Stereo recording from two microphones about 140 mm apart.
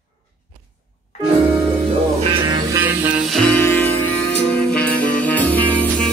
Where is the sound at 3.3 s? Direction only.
5° left (ahead or behind).